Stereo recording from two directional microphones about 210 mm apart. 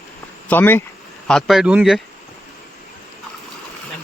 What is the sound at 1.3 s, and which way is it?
Speech, centre (ahead or behind).